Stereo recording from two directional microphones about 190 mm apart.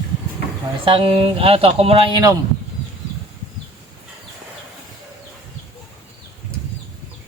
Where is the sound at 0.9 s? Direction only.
30° right (ahead or behind).